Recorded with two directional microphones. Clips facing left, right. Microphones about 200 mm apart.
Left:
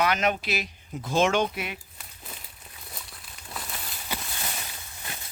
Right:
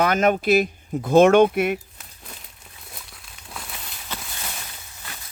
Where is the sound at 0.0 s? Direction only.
50° right (ahead or behind).